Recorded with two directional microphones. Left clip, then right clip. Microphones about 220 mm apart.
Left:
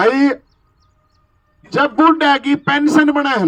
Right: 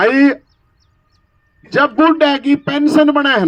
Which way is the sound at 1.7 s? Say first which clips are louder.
Right 1 dB; 20° right (ahead or behind).